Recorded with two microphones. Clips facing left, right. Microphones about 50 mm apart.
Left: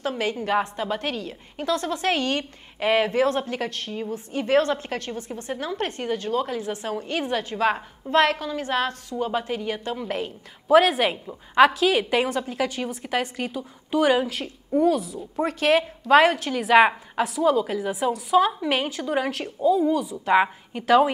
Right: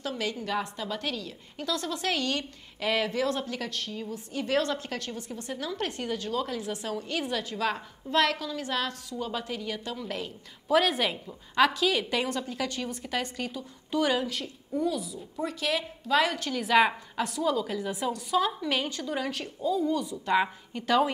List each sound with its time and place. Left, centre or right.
0.0 s a woman's voice: left
13.0 s a woman's voice: left
13.5 s a woman's voice: left
14.4 s a woman's voice: left
16.4 s a woman's voice: left